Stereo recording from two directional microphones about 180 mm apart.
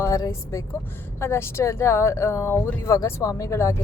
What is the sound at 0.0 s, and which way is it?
A woman's voice, 15° left (ahead or behind).